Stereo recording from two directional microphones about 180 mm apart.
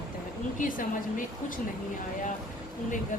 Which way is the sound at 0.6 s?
50° left (ahead or behind).